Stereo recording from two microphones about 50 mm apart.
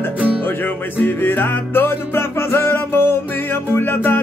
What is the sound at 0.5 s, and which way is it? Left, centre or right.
Music, left.